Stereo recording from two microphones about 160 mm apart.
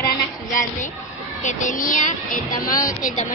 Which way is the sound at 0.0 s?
70° left (ahead or behind).